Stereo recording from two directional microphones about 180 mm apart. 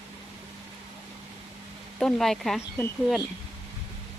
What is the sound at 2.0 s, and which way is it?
Speech, centre (ahead or behind).